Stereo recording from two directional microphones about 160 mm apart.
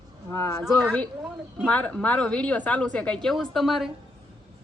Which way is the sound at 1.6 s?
5° left (ahead or behind).